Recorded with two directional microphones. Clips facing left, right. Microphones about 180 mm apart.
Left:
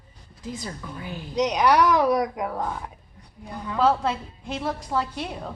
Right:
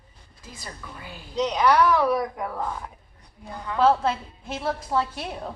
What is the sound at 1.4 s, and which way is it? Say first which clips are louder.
A woman's voice: left 1 dB; 15° left (ahead or behind).